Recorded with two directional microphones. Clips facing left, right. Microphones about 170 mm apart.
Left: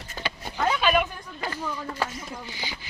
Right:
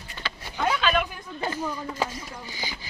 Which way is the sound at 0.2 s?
40° left (ahead or behind).